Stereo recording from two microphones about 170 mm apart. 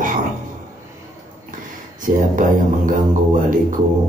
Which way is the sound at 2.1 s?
50° right (ahead or behind).